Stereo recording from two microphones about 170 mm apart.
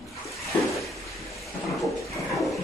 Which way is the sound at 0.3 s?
Centre (ahead or behind).